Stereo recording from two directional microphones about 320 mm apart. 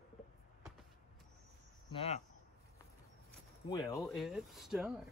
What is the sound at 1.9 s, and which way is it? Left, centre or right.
Speech, centre.